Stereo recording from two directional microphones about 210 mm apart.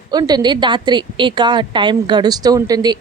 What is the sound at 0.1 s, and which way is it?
Speech, 20° right (ahead or behind).